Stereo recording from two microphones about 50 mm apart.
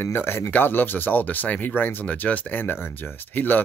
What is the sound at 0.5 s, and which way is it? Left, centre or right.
Speech, left.